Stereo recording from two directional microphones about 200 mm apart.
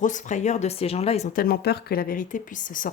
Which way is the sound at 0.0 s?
40° left (ahead or behind).